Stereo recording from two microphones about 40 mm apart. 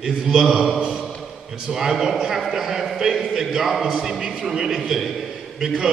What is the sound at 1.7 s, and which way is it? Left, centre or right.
A man's voice, centre.